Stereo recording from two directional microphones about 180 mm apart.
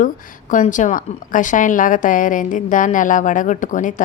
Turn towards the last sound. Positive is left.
turn(degrees=45)  # may be behind; listen again after turning